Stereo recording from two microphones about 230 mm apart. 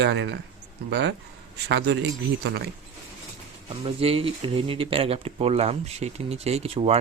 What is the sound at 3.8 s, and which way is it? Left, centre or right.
Speech, right.